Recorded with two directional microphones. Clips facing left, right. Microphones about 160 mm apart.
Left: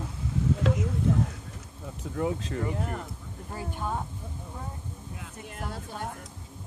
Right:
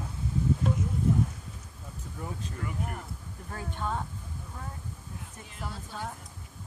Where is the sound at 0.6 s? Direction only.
90° left.